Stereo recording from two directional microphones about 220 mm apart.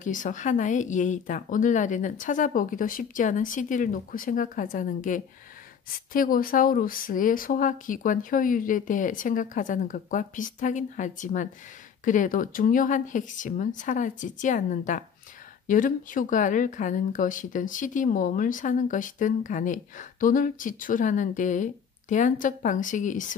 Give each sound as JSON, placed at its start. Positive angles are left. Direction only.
{"t": 0.0, "sound": "speech", "side_deg": 35}